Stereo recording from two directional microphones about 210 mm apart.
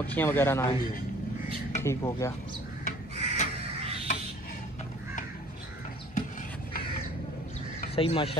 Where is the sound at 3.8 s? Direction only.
30° right (ahead or behind).